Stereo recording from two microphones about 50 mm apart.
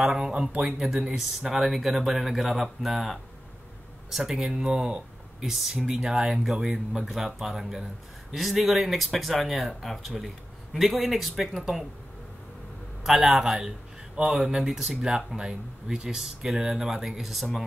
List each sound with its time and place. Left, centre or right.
0.0 s speech: centre
0.3 s speech: right
0.6 s speech: centre
4.5 s speech: centre
5.5 s speech: centre
13.0 s a man's voice: centre